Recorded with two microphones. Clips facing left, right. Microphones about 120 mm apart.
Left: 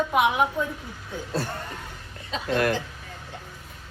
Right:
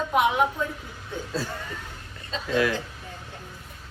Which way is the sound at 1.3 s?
60° left (ahead or behind).